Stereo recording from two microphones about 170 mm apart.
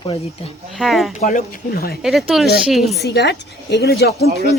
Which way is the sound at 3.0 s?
75° left (ahead or behind).